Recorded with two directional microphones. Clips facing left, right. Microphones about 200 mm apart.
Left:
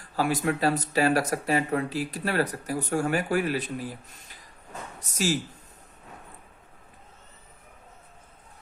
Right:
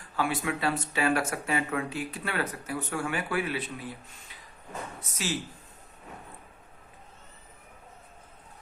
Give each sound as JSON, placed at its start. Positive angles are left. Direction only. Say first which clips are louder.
{"t": 0.2, "sound": "speech", "louder": "left 4 dB", "side_deg": 40}